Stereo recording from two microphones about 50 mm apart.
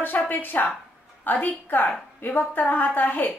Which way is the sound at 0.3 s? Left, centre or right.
Left.